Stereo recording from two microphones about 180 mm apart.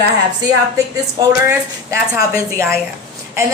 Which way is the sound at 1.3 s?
15° right (ahead or behind).